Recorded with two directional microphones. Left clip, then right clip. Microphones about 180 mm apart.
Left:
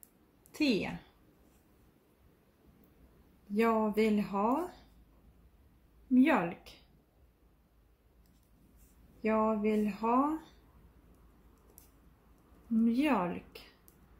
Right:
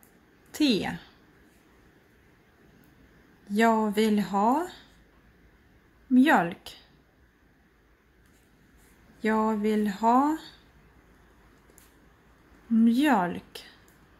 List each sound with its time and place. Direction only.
0.5 s a woman's voice: 35° right (ahead or behind)
3.5 s speech: 40° right (ahead or behind)
6.1 s speech: 40° right (ahead or behind)
9.2 s speech: 40° right (ahead or behind)
12.8 s speech: 40° right (ahead or behind)